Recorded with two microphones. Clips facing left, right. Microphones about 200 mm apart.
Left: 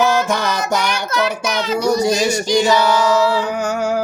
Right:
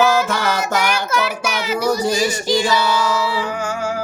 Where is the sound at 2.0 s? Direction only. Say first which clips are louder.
Left 2 dB; 15° left (ahead or behind).